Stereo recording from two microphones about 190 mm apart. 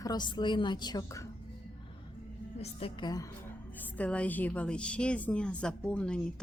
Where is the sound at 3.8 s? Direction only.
5° left (ahead or behind).